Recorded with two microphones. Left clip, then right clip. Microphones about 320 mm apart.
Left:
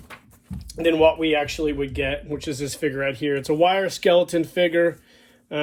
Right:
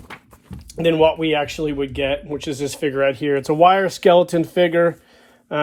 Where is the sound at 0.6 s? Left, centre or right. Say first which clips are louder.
Right 2 dB; right.